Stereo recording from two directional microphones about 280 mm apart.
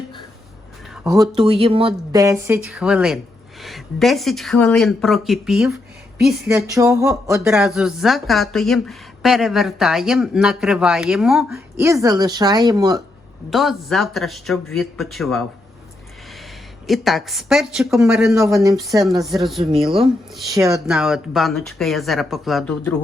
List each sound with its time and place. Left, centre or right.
1.0 s speech: centre
13.5 s speech: centre
16.8 s speech: centre
19.3 s speech: centre
20.5 s speech: centre